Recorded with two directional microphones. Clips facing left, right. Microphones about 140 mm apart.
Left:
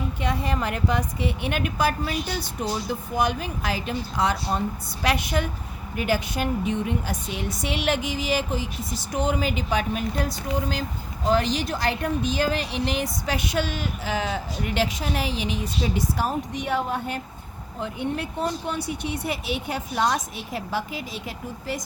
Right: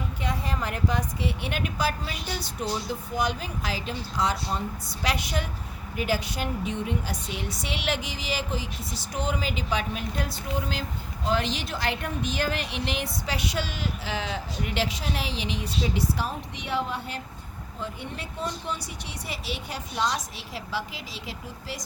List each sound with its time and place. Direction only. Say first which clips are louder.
0.2 s a woman's voice: left 4 dB; 65° left (ahead or behind); by 17.2 s 50° left (ahead or behind)
17.7 s speech: left 8 dB; 60° left (ahead or behind)